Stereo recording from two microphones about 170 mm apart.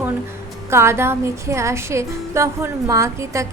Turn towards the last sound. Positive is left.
turn(degrees=-15)  # may be behind; listen again after turning